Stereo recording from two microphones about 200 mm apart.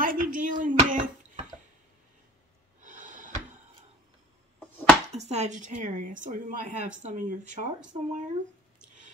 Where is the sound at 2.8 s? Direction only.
40° right (ahead or behind).